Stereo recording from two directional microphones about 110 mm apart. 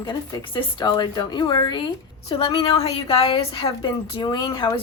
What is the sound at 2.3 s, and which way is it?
A woman's voice, 55° left (ahead or behind).